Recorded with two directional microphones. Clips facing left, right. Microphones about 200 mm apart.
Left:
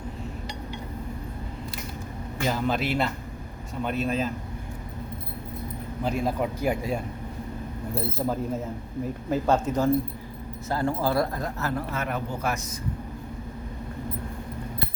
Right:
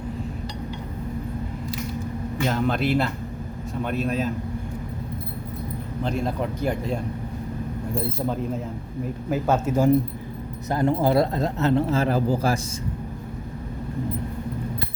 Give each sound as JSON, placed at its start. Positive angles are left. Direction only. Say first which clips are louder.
{"t": 2.5, "sound": "a man's voice", "louder": "right 3 dB", "side_deg": 0}
{"t": 6.0, "sound": "speech", "louder": "even", "side_deg": 5}
{"t": 9.3, "sound": "speech", "louder": "right 1 dB", "side_deg": -5}
{"t": 10.7, "sound": "speech", "louder": "right 5 dB", "side_deg": -20}